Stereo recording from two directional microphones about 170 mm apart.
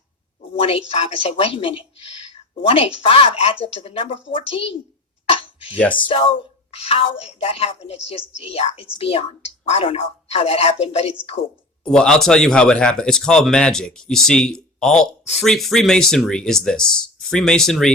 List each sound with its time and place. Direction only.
0.6 s a woman's voice: 35° left (ahead or behind)
5.2 s a sound: 35° left (ahead or behind)
6.1 s a woman's voice: 30° left (ahead or behind)
11.9 s speech: 5° left (ahead or behind)